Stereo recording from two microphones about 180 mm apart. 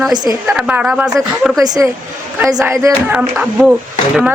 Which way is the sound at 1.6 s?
20° right (ahead or behind).